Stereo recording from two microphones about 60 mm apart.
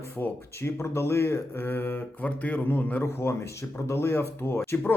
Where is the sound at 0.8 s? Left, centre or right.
Left.